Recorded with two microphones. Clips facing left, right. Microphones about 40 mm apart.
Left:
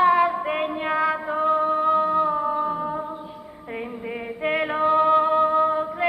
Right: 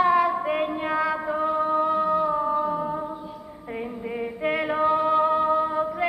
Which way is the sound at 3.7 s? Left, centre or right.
Left.